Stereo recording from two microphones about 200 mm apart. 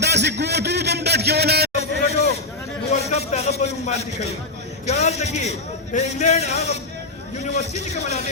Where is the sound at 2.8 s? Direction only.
35° left (ahead or behind).